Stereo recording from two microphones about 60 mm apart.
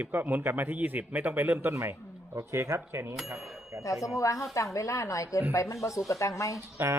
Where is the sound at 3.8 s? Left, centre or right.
Left.